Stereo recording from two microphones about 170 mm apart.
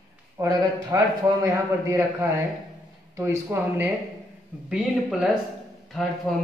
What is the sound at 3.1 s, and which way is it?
Speech, 15° right (ahead or behind).